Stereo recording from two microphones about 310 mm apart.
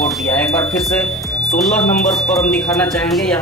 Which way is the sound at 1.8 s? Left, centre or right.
Left.